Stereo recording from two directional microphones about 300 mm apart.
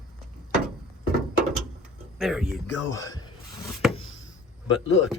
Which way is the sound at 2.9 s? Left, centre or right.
Centre.